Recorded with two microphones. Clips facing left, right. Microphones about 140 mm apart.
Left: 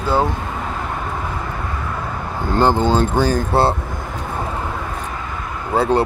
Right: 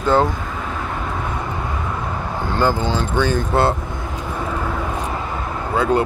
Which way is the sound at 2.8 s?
45° left (ahead or behind).